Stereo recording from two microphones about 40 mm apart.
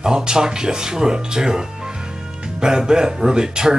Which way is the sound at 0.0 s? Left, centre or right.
Centre.